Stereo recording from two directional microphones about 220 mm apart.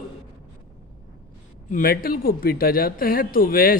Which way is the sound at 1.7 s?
40° left (ahead or behind).